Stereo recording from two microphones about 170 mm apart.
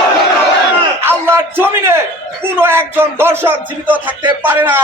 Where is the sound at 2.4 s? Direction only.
15° right (ahead or behind).